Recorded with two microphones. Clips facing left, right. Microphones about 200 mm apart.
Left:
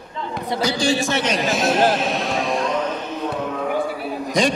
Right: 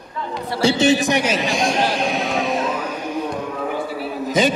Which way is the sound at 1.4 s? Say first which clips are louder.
Left 1 dB; 5° left (ahead or behind).